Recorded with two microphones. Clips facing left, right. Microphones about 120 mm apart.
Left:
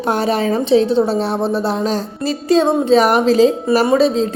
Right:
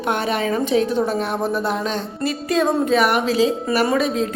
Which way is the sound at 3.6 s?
30° left (ahead or behind).